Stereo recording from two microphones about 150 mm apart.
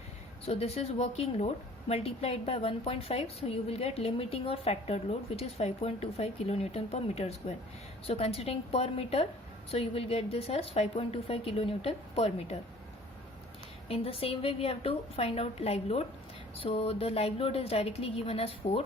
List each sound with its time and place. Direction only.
0.4 s a woman's voice: 40° left (ahead or behind)
13.8 s a woman's voice: 40° left (ahead or behind)